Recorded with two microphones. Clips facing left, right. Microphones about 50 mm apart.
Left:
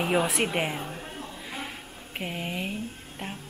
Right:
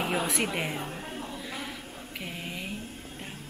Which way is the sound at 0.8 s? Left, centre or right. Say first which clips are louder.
Right 1 dB; centre.